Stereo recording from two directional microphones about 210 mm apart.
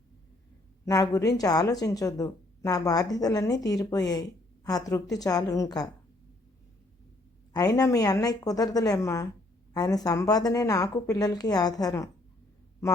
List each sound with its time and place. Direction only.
0.9 s a woman's voice: 15° left (ahead or behind)
7.5 s a woman's voice: 15° left (ahead or behind)